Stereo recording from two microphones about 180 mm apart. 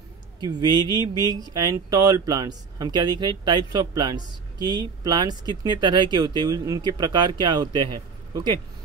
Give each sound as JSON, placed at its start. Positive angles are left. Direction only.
{"t": 0.4, "sound": "speech", "side_deg": -25}